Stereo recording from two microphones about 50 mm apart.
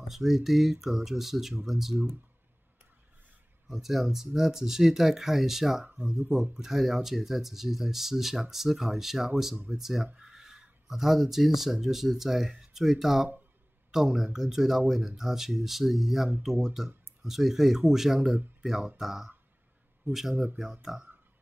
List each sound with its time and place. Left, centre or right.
0.1 s speech: centre
3.6 s speech: centre
5.9 s speech: right
6.5 s speech: centre